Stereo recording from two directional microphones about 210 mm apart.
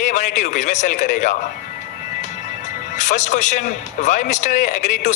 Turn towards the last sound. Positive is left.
turn(degrees=35)  # may be behind; listen again after turning